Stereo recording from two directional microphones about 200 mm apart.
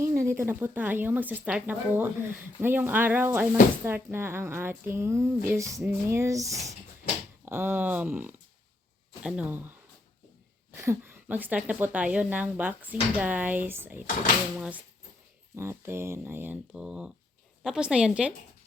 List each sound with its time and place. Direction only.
0.0 s speech: 15° right (ahead or behind)
10.8 s speech: 10° right (ahead or behind)
15.5 s a woman's voice: 10° right (ahead or behind)